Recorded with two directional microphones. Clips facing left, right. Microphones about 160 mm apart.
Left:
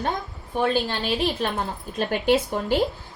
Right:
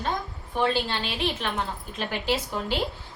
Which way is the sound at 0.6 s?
45° left (ahead or behind).